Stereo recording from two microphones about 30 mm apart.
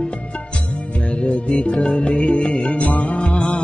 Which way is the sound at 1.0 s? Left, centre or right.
Left.